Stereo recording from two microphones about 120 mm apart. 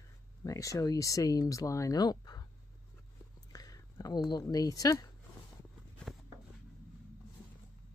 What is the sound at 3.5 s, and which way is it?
Speech, 30° left (ahead or behind).